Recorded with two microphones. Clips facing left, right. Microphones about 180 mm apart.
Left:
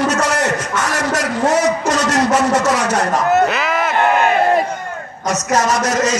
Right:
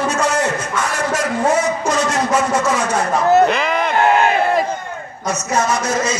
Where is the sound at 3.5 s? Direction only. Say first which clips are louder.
Right 1 dB; centre (ahead or behind).